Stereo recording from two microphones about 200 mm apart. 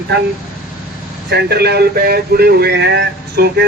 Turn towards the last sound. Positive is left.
turn(degrees=-55)  # may be behind; listen again after turning